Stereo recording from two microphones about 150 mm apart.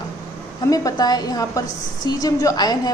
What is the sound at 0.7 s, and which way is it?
A woman's voice, 25° left (ahead or behind).